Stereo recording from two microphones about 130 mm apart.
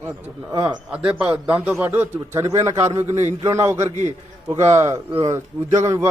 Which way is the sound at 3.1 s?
60° right (ahead or behind).